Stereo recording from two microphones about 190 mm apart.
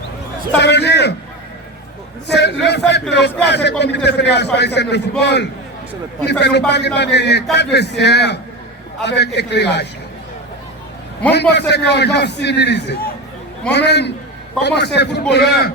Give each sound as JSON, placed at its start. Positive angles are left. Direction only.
{"t": 0.6, "sound": "a sound", "side_deg": 65}
{"t": 2.2, "sound": "a man's voice", "side_deg": 60}
{"t": 6.7, "sound": "a man's voice", "side_deg": 65}
{"t": 11.3, "sound": "a man's voice", "side_deg": 65}